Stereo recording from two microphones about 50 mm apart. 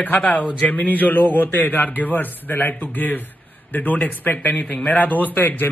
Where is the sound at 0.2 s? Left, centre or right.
Left.